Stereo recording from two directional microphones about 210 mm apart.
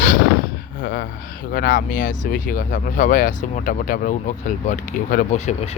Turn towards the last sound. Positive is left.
turn(degrees=30)  # may be behind; listen again after turning